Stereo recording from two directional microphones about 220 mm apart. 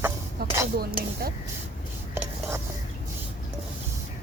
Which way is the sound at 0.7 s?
45° right (ahead or behind).